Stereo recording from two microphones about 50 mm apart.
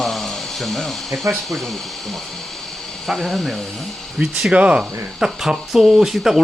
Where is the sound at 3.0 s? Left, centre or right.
Centre.